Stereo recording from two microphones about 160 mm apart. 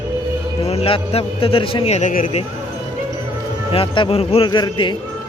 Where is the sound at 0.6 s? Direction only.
40° left (ahead or behind).